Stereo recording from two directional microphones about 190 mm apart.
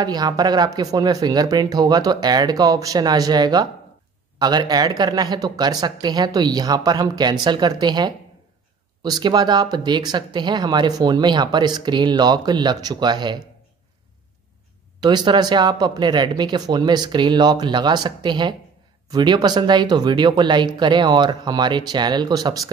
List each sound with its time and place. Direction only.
0.0 s speech: 20° right (ahead or behind)
15.0 s speech: 25° right (ahead or behind)